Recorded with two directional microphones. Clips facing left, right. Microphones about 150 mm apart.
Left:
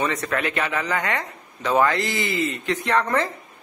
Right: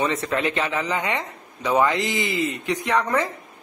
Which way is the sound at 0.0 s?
20° right (ahead or behind).